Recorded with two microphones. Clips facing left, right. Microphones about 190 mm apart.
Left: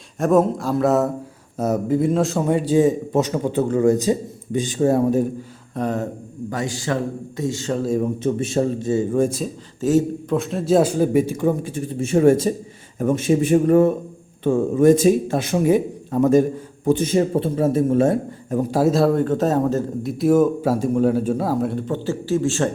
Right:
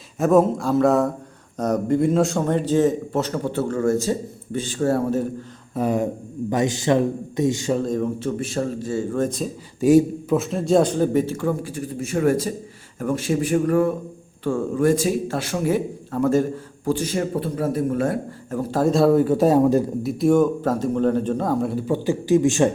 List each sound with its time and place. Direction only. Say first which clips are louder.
0.2 s a man's voice: even; centre (ahead or behind); by 5.3 s 15° left (ahead or behind)
5.7 s speech: right 2 dB; 10° right (ahead or behind)
6.5 s a man's voice: right 5 dB; 20° right (ahead or behind)
7.7 s speech: left 1 dB; 5° left (ahead or behind)
8.4 s a man's voice: left 4 dB; 25° left (ahead or behind)
9.8 s a man's voice: right 3 dB; 10° right (ahead or behind); by 18.6 s 25° left (ahead or behind)
18.7 s a man's voice: right 1 dB; 5° left (ahead or behind); by 22.7 s 15° right (ahead or behind)